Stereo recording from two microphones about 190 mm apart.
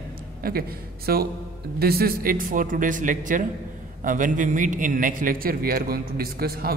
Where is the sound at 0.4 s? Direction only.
50° right (ahead or behind).